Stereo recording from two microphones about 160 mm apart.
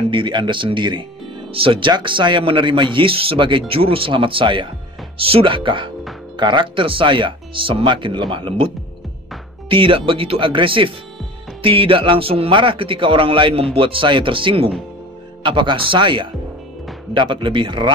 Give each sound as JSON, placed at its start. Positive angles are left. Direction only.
{"t": 0.1, "sound": "a man's voice", "side_deg": -30}